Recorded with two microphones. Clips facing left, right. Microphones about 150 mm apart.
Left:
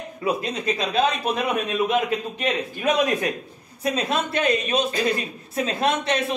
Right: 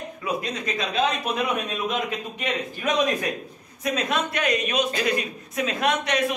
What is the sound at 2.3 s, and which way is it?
A man's voice, 30° left (ahead or behind).